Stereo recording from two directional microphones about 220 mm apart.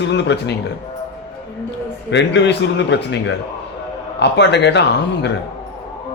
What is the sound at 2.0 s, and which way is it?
A man's voice, 55° left (ahead or behind).